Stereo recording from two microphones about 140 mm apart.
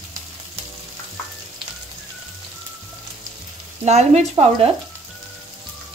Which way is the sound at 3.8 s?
50° right (ahead or behind).